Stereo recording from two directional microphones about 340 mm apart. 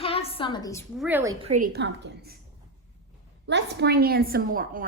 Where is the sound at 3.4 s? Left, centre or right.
Right.